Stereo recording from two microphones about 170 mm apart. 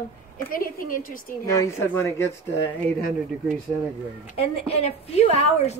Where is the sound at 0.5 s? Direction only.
55° left (ahead or behind).